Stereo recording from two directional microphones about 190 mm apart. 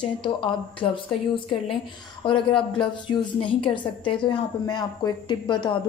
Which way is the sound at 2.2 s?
25° left (ahead or behind).